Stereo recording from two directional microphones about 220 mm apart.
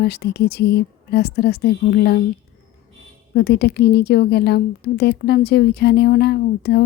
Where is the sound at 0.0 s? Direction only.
45° left (ahead or behind).